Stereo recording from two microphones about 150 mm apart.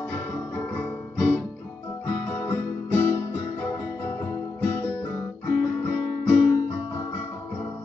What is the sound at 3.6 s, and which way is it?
Guitar, 15° left (ahead or behind).